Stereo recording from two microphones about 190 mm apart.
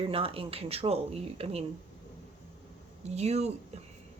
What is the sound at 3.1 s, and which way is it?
Speech, 35° right (ahead or behind).